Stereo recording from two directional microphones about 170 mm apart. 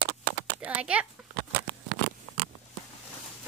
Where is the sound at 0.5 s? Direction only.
10° right (ahead or behind).